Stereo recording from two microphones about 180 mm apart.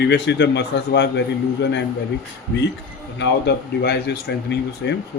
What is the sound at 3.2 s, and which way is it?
Speech, 70° left (ahead or behind).